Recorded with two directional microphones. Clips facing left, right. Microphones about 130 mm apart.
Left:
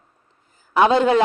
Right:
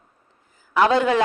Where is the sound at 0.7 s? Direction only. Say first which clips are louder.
Left 2 dB; 25° left (ahead or behind).